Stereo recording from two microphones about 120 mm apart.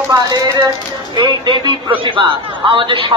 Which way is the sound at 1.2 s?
40° right (ahead or behind).